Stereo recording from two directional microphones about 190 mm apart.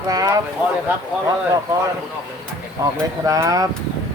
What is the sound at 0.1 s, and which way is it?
Speech, 20° right (ahead or behind).